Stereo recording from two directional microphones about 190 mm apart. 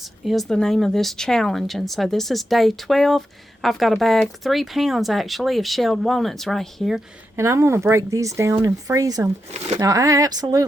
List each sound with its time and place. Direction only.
0.0 s a woman's voice: centre (ahead or behind)
7.3 s speech: 15° right (ahead or behind)